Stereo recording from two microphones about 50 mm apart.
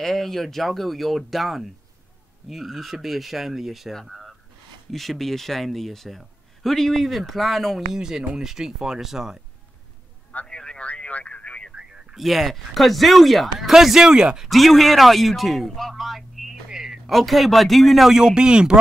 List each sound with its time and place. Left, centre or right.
0.0 s a man's voice: centre
7.9 s speech: centre
10.4 s a sound: centre
11.7 s a sound: centre
12.2 s a man's voice: centre
14.5 s a man's voice: centre
16.6 s a sound: centre
17.1 s a man's voice: centre
18.1 s speech: centre